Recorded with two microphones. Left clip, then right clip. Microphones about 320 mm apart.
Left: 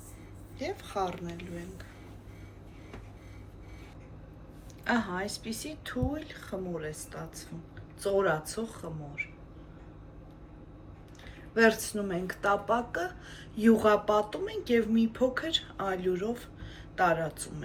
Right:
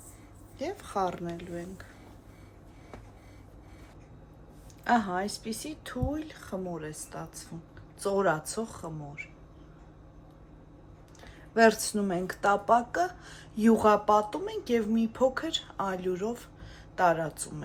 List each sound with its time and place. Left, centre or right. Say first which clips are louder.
0.6 s speech: right 2 dB; right
4.8 s speech: right 4 dB; right
11.5 s speech: right 2 dB; right